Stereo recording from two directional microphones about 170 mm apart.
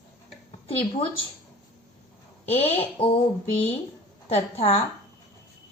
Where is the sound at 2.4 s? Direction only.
35° left (ahead or behind).